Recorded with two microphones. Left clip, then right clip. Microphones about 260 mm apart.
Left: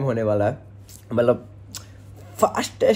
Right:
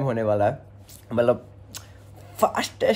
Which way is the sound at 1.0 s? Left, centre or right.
Centre.